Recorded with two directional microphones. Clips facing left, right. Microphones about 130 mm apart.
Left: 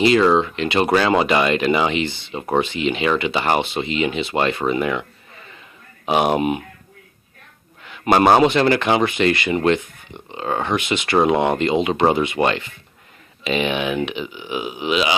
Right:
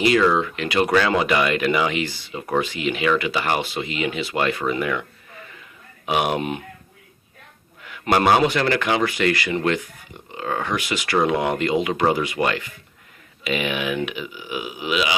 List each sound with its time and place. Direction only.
0.0 s speech: 25° left (ahead or behind)
6.1 s speech: 30° left (ahead or behind)
8.3 s speech: 25° left (ahead or behind)